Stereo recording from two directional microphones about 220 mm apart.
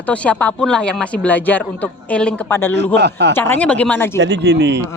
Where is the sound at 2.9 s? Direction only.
50° right (ahead or behind).